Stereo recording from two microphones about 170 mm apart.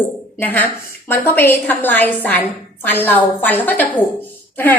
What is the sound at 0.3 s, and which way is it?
A woman's voice, 10° left (ahead or behind).